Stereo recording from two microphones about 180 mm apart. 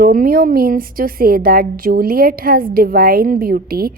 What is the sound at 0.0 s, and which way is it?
A woman's voice, 50° right (ahead or behind).